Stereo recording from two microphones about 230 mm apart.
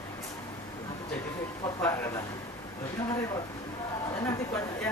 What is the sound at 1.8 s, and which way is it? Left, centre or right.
Speech, centre.